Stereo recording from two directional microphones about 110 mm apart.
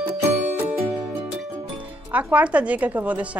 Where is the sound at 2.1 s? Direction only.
15° right (ahead or behind).